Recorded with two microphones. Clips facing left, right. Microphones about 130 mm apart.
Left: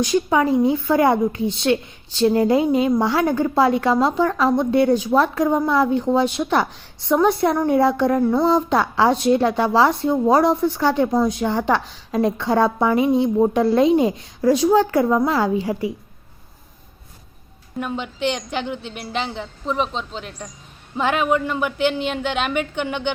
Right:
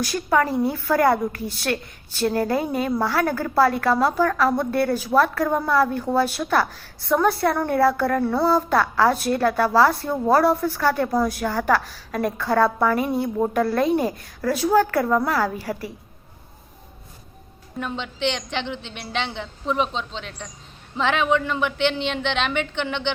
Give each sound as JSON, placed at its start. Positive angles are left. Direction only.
{"t": 0.0, "sound": "a woman's voice", "side_deg": 15}
{"t": 17.7, "sound": "a woman's voice", "side_deg": 5}